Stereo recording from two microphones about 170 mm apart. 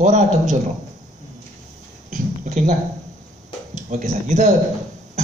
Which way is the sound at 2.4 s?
45° right (ahead or behind).